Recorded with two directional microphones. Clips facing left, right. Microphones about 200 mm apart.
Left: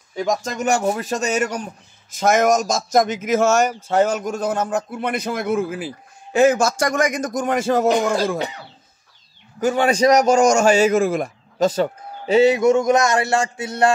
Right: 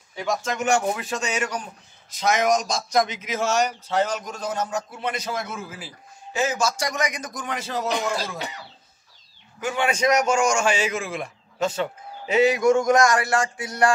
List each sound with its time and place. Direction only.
0.1 s a man's voice: 40° left (ahead or behind)
9.6 s a man's voice: 40° left (ahead or behind)